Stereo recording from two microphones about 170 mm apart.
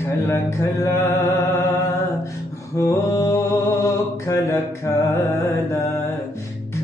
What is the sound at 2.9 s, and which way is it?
Mantra, 20° left (ahead or behind).